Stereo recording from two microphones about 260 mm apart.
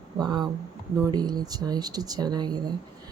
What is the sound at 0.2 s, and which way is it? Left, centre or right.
Speech, centre.